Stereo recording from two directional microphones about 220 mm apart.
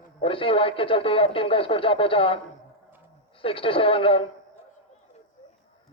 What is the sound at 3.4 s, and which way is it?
Speech, 25° left (ahead or behind).